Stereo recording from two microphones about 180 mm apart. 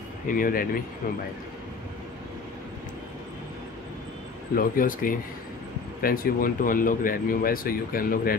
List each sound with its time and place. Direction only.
0.3 s speech: 50° left (ahead or behind)
4.6 s speech: 50° left (ahead or behind)